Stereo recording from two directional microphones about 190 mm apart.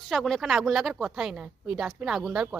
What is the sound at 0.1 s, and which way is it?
Speech, centre (ahead or behind).